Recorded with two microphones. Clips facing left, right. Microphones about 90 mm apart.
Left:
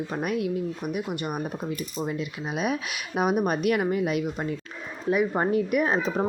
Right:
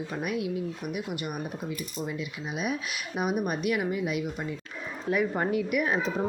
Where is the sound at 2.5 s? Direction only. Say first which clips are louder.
Left 4 dB; 50° left (ahead or behind).